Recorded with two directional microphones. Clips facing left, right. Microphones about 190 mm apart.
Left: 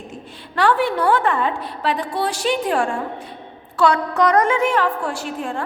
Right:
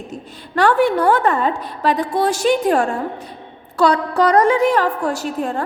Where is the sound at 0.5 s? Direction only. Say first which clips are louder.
Right 3 dB; 45° right (ahead or behind).